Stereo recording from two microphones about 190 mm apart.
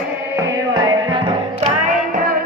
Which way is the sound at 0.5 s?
20° right (ahead or behind).